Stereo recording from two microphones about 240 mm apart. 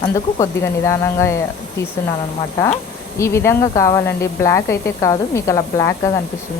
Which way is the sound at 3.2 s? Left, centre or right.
Centre.